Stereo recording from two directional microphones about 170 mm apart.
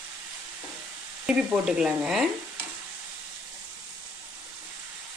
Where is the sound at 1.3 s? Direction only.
5° right (ahead or behind).